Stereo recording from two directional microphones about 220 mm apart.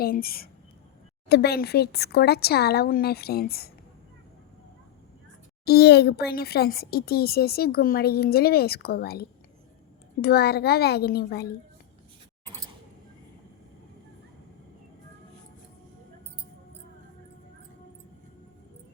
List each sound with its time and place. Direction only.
0.0 s speech: 45° left (ahead or behind)
5.6 s speech: 45° left (ahead or behind)